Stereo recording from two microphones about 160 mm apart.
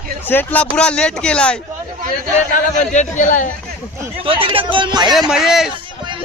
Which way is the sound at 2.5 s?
50° left (ahead or behind).